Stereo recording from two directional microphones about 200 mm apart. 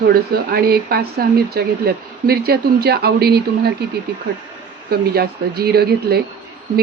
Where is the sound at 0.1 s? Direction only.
50° right (ahead or behind).